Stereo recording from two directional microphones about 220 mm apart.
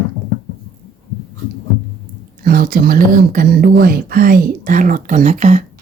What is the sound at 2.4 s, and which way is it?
Speech, 40° right (ahead or behind).